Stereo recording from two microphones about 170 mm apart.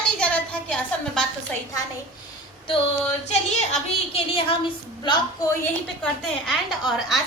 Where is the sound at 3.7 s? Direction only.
35° left (ahead or behind).